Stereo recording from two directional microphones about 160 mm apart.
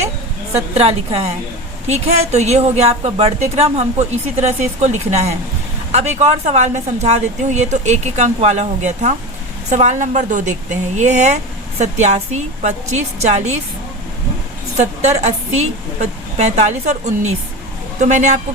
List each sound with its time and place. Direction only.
0.7 s a woman's voice: 40° right (ahead or behind)
15.0 s speech: 45° right (ahead or behind)